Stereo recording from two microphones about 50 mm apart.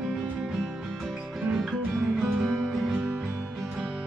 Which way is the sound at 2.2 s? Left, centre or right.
Centre.